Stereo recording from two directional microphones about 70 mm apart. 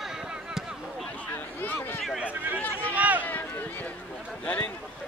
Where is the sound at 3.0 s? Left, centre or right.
Right.